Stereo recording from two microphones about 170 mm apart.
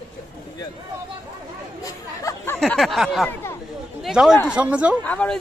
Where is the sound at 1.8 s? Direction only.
15° left (ahead or behind).